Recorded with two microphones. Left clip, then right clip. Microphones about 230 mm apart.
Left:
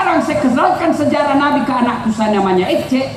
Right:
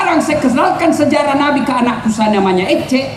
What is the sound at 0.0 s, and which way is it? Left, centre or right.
A woman's voice, right.